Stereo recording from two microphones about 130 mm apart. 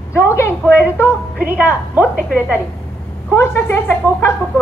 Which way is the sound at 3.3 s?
20° left (ahead or behind).